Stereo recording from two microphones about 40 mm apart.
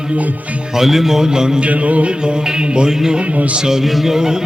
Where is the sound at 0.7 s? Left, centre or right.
Centre.